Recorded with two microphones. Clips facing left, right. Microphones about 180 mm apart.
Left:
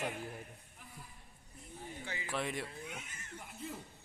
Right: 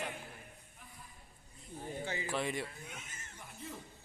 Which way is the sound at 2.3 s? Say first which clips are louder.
Even; centre (ahead or behind).